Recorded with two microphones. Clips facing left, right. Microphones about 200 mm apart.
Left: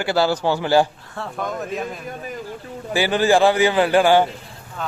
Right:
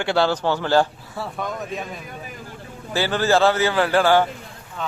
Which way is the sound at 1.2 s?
Centre (ahead or behind).